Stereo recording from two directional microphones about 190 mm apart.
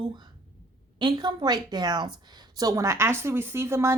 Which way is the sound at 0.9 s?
25° right (ahead or behind).